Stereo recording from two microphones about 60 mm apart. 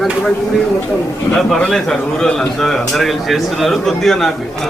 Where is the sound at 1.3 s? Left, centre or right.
Centre.